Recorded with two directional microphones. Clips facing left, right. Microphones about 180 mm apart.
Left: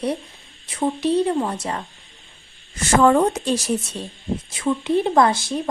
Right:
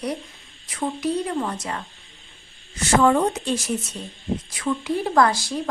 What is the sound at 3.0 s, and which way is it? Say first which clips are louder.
Speech: left 4 dB; 50° left (ahead or behind).